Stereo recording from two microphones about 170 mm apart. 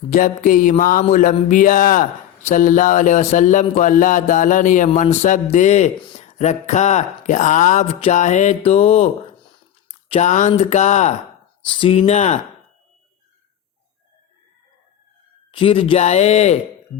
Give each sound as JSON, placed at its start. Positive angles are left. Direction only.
{"t": 0.1, "sound": "mantra", "side_deg": 50}
{"t": 10.1, "sound": "mantra", "side_deg": 45}
{"t": 11.6, "sound": "speech", "side_deg": 30}
{"t": 15.5, "sound": "speech", "side_deg": 30}